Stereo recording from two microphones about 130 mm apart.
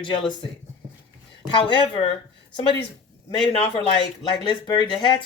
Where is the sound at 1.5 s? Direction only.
40° left (ahead or behind).